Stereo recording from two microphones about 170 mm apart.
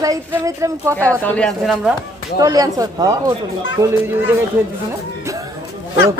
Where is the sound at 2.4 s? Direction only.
20° right (ahead or behind).